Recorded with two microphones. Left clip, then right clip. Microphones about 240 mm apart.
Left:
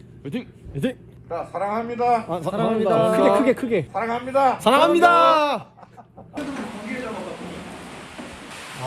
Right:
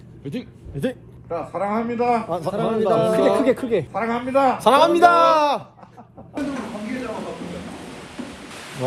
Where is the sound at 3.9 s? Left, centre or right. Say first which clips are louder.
Right 1 dB; left.